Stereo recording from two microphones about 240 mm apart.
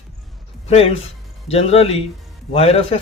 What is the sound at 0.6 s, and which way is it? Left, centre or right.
Speech, left.